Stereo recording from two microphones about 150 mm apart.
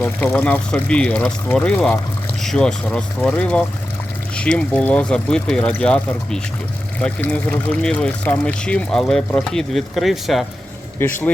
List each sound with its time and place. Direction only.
0.3 s speech: 10° left (ahead or behind)